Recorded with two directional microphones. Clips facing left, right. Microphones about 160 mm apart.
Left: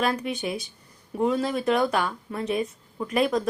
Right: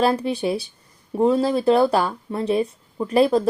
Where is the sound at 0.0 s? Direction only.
30° right (ahead or behind).